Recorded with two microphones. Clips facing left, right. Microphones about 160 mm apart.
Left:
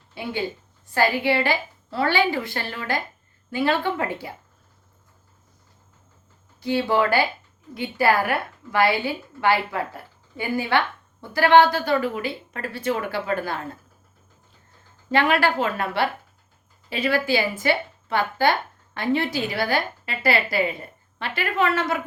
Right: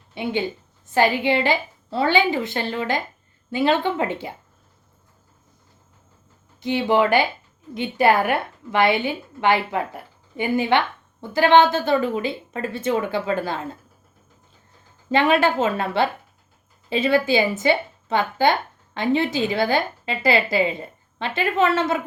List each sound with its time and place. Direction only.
0.1 s a woman's voice: 20° right (ahead or behind)
6.6 s a woman's voice: 20° right (ahead or behind)
15.1 s a woman's voice: 20° right (ahead or behind)